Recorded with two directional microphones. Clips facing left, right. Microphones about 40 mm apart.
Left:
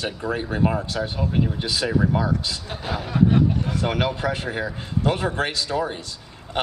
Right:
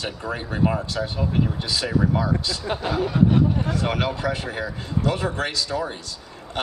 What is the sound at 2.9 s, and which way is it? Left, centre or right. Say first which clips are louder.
Snicker: even; centre.